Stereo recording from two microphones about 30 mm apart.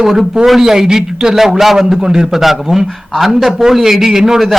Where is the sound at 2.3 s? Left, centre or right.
Centre.